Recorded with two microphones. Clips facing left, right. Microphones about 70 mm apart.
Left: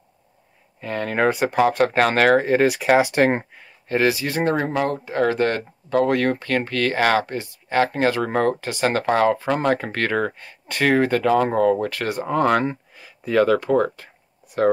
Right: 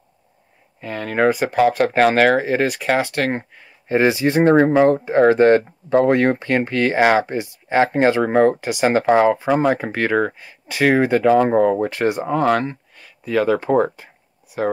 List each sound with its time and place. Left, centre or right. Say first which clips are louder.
0.7 s speech: right 2 dB; centre
3.0 s speech: left 3 dB; centre
3.9 s speech: right 4 dB; right
12.3 s speech: left 3 dB; centre
13.6 s speech: right 2 dB; right
14.5 s speech: left 2 dB; centre